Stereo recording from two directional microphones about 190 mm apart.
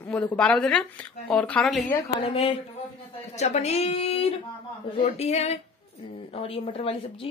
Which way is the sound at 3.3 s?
35° left (ahead or behind).